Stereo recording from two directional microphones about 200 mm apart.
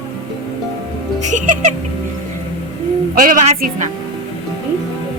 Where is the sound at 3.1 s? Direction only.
40° right (ahead or behind).